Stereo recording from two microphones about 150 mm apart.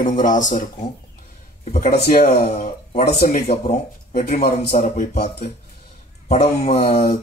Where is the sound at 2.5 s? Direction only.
55° left (ahead or behind).